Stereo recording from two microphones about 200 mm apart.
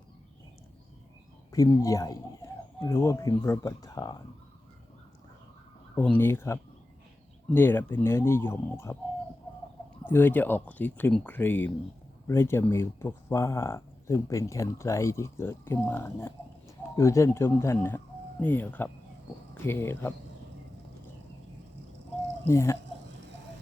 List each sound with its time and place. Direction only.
1.5 s speech: 15° left (ahead or behind)
5.9 s speech: 10° left (ahead or behind)
10.0 s speech: 10° left (ahead or behind)
22.4 s speech: 15° left (ahead or behind)